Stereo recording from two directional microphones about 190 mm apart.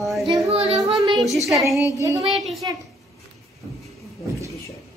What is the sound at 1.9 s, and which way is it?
Speech, 15° right (ahead or behind).